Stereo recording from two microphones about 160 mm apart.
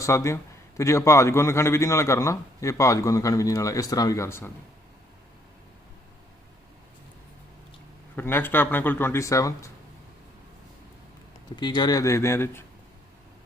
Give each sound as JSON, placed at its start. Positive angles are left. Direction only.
{"t": 0.0, "sound": "a man's voice", "side_deg": 15}
{"t": 8.1, "sound": "speech", "side_deg": 15}
{"t": 11.5, "sound": "a man's voice", "side_deg": 30}